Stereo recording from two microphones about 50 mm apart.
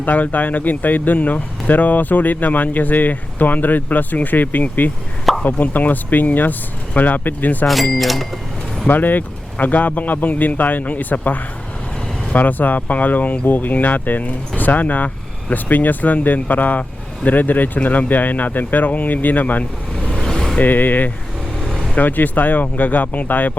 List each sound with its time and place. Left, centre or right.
0.0 s speech: left
7.9 s speech: centre
8.9 s speech: left
20.1 s vehicle: centre
20.6 s speech: left
21.6 s vehicle: centre
21.9 s speech: left